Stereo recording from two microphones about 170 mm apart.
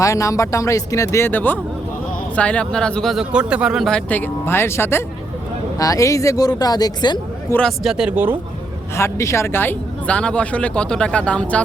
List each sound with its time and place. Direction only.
0.0 s speech: 20° left (ahead or behind)
7.5 s speech: centre (ahead or behind)
9.0 s speech: 15° left (ahead or behind)